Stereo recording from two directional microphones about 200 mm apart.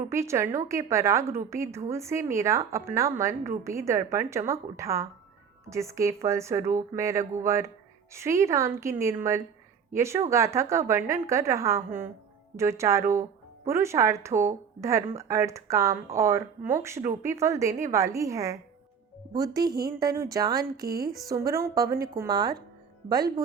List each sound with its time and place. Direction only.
0.1 s a woman's voice: 15° right (ahead or behind)